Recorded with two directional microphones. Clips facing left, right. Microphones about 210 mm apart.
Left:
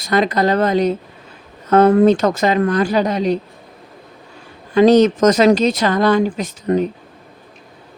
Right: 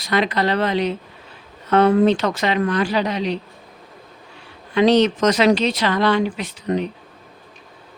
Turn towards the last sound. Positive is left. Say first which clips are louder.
# left 5 dB
turn(degrees=45)  # may be behind; listen again after turning